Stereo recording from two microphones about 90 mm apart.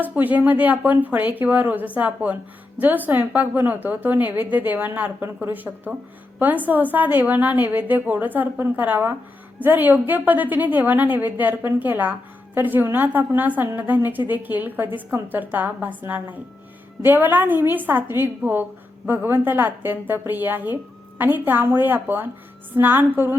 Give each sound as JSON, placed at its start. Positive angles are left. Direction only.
{"t": 0.0, "sound": "a woman's voice", "side_deg": -20}